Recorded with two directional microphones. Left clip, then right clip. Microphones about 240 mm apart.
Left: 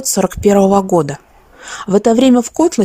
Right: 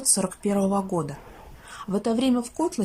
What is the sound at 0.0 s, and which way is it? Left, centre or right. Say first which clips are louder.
A woman's voice: left 13 dB; left.